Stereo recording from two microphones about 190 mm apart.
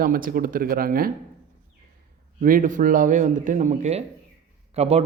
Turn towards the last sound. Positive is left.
turn(degrees=-35)  # may be behind; listen again after turning